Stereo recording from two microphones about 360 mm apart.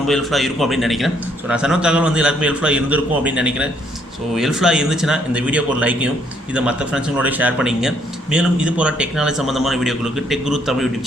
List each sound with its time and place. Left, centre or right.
0.1 s a man's voice: centre